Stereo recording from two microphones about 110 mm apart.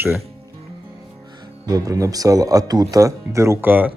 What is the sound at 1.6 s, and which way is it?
Speech, 35° right (ahead or behind).